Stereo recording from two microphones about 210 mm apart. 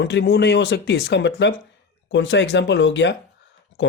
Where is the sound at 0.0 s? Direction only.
55° left (ahead or behind).